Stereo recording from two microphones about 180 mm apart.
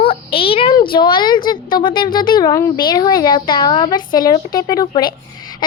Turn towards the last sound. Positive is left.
turn(degrees=25)  # may be behind; listen again after turning